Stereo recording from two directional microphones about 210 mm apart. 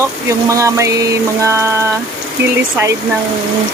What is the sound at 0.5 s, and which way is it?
Speech, 15° right (ahead or behind).